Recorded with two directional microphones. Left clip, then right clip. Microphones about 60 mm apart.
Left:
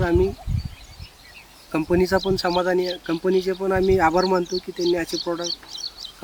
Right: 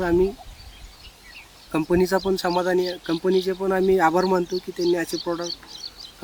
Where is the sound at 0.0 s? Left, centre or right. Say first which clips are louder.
Even; centre.